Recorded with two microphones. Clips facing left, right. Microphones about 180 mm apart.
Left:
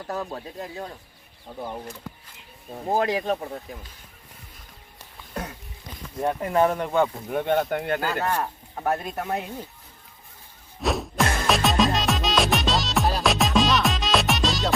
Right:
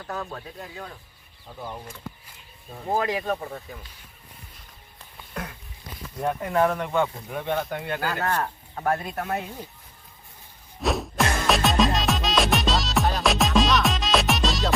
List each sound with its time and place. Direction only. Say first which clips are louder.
0.2 s speech: left 3 dB; 20° left (ahead or behind)
0.6 s speech: left 4 dB; 30° left (ahead or behind)
2.9 s speech: left 2 dB; 25° left (ahead or behind)
3.3 s speech: left 2 dB; 10° left (ahead or behind)
5.3 s a sound: left 2 dB; 25° left (ahead or behind)
6.1 s speech: left 1 dB; 20° left (ahead or behind)
6.9 s speech: left 3 dB; 45° left (ahead or behind)
8.0 s speech: left 1 dB; 10° left (ahead or behind)
10.8 s music: even; centre (ahead or behind)